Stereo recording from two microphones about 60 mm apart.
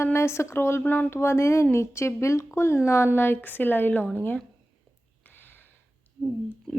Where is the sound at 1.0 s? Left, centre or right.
Left.